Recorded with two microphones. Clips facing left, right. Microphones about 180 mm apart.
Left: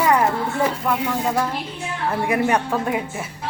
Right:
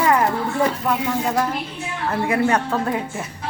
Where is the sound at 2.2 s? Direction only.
15° left (ahead or behind).